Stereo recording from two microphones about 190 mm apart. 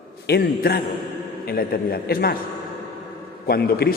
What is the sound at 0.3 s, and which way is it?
A man's voice, 55° left (ahead or behind).